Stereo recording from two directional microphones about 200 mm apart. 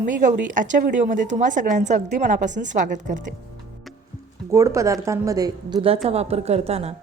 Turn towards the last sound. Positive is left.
turn(degrees=-30)  # may be behind; listen again after turning